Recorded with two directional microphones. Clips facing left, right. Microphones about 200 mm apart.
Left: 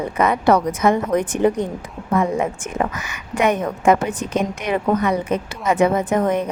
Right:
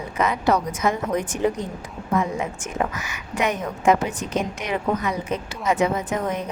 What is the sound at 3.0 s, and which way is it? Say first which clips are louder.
A woman's voice: left 5 dB; 55° left (ahead or behind).